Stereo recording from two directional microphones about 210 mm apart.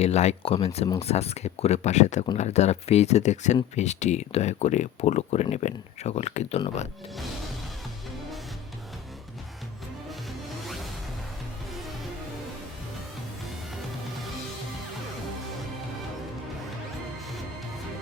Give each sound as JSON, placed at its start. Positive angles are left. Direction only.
{"t": 0.0, "sound": "speech", "side_deg": 30}
{"t": 10.1, "sound": "music", "side_deg": 0}